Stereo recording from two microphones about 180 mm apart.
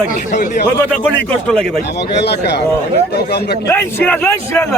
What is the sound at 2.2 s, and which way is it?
Speech, 65° left (ahead or behind).